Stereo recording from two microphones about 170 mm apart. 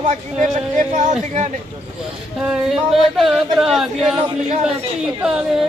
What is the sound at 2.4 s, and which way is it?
Speech, 5° right (ahead or behind).